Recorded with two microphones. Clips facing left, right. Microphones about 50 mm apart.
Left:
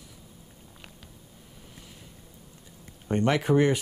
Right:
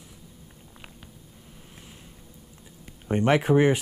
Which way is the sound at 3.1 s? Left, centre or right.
Centre.